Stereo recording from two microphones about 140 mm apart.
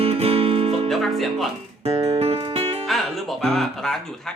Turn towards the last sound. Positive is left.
turn(degrees=5)  # may be behind; listen again after turning